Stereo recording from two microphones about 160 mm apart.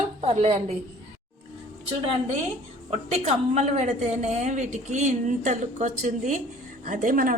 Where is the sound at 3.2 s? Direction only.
45° right (ahead or behind).